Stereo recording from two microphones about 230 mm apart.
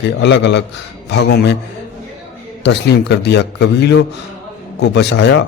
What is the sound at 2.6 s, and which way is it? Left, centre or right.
Speech, left.